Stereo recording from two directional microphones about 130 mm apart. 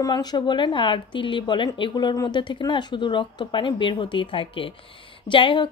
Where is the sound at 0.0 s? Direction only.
30° left (ahead or behind).